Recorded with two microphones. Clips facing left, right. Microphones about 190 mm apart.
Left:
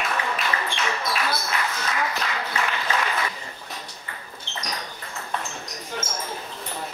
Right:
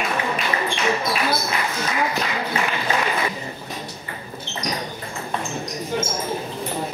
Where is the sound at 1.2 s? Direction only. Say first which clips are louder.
Right 4 dB; 20° right (ahead or behind).